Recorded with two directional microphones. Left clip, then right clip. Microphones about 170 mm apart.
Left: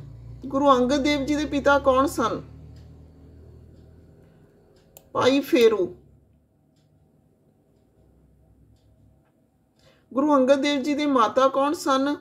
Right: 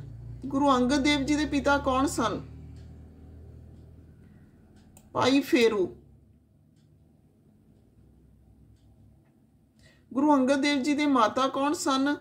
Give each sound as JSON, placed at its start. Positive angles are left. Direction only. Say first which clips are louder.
{"t": 0.5, "sound": "speech", "louder": "left 5 dB", "side_deg": 0}
{"t": 5.1, "sound": "speech", "louder": "left 4 dB", "side_deg": 0}
{"t": 9.8, "sound": "speech", "louder": "left 2 dB", "side_deg": 0}